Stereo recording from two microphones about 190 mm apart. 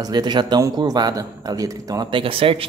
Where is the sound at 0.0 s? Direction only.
20° right (ahead or behind).